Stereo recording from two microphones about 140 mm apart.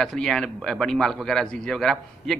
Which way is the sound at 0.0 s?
5° left (ahead or behind).